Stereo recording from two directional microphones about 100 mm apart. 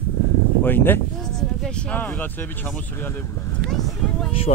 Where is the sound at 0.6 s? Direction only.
20° left (ahead or behind).